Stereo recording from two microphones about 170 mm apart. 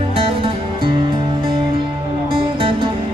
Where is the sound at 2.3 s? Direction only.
30° right (ahead or behind).